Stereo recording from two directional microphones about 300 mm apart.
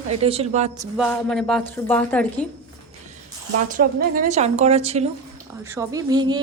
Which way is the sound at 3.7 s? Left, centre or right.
Right.